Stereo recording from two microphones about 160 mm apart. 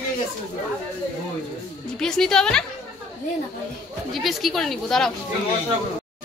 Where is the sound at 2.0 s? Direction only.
5° left (ahead or behind).